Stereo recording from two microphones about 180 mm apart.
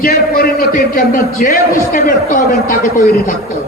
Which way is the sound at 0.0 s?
55° left (ahead or behind).